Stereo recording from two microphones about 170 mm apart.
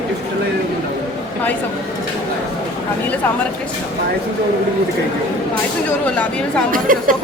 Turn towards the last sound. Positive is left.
turn(degrees=-55)  # may be behind; listen again after turning